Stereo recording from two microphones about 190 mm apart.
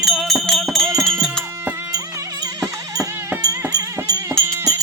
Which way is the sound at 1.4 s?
10° right (ahead or behind).